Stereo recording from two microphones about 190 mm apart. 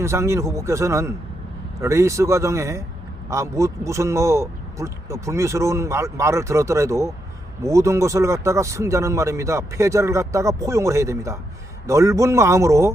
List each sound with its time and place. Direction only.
0.0 s speech: 15° right (ahead or behind)